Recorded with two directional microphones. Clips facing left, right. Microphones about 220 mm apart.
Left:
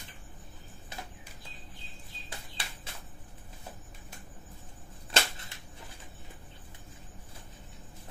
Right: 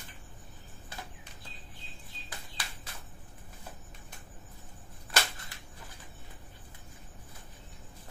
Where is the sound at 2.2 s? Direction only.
25° left (ahead or behind).